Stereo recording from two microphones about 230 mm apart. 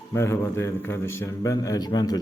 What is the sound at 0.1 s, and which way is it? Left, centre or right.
A man's voice, centre.